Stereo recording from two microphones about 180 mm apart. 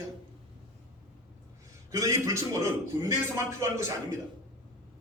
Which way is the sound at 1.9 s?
15° right (ahead or behind).